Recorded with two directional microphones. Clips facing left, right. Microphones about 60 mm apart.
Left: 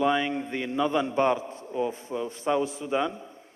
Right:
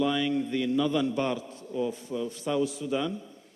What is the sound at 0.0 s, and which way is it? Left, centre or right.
A man's voice, left.